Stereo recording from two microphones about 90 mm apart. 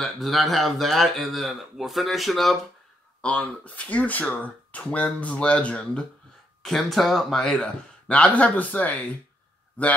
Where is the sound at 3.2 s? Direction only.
15° left (ahead or behind).